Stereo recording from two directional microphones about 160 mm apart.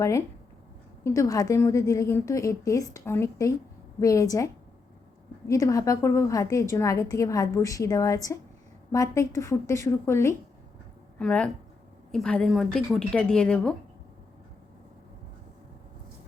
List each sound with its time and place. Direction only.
1.0 s a woman's voice: 20° left (ahead or behind)